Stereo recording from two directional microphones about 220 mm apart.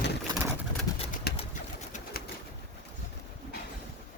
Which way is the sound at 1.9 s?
40° left (ahead or behind).